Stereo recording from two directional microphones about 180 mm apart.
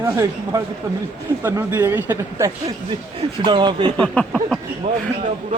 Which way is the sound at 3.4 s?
25° right (ahead or behind).